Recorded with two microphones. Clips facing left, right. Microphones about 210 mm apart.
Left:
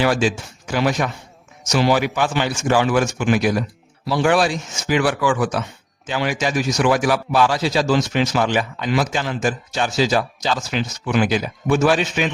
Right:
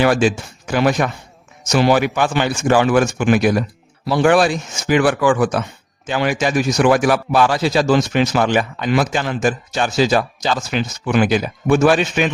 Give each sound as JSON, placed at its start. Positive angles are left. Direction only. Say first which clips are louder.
{"t": 0.0, "sound": "a man's voice", "louder": "right 3 dB", "side_deg": -55}